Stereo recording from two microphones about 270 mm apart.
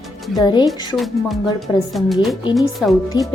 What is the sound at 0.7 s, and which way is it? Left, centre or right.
Speech, centre.